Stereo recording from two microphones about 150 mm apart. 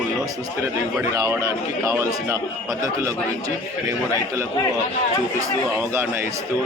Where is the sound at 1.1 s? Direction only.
20° right (ahead or behind).